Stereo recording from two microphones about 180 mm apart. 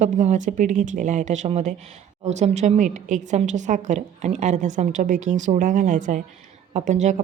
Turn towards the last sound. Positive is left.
turn(degrees=-40)  # may be behind; listen again after turning